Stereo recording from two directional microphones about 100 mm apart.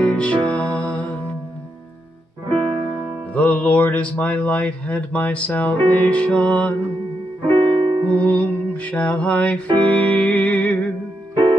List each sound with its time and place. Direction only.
0.1 s music: 10° left (ahead or behind)
3.3 s speech: 15° left (ahead or behind)
7.4 s music: 50° right (ahead or behind)
8.2 s music: 15° left (ahead or behind)